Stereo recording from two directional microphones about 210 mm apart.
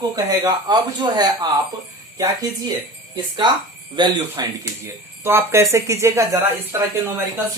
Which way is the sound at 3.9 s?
20° right (ahead or behind).